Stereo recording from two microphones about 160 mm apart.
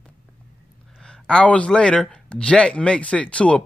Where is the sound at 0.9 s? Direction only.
5° left (ahead or behind).